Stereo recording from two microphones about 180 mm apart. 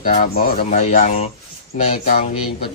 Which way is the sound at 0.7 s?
40° left (ahead or behind).